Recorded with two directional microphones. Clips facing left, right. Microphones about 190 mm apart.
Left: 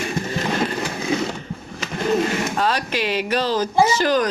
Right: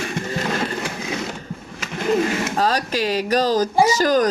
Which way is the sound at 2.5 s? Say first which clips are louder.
Right 1 dB; 40° right (ahead or behind).